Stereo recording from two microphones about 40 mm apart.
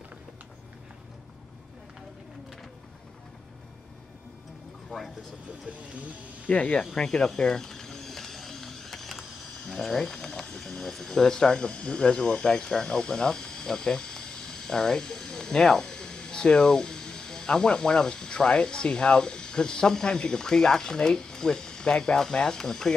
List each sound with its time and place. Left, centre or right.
6.4 s speech: left
7.0 s speech: centre